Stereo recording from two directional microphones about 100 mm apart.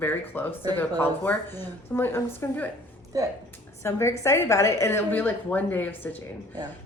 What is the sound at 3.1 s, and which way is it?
Speech, 35° right (ahead or behind).